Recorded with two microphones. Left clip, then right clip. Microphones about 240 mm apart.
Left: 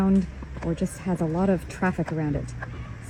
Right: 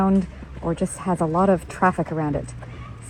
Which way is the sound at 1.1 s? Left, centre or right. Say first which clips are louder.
Right 6 dB; right.